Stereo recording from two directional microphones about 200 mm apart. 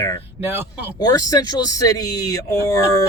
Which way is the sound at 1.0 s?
20° left (ahead or behind).